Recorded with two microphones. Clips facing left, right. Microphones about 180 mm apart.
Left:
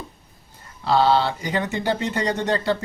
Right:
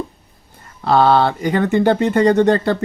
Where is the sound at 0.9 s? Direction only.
55° right (ahead or behind).